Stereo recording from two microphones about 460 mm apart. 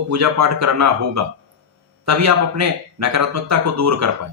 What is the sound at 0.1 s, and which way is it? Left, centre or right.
A man's voice, right.